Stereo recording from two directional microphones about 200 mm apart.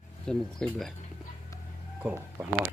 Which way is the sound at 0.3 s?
Centre (ahead or behind).